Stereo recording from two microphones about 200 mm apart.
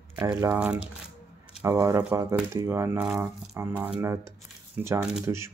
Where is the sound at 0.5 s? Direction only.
5° right (ahead or behind).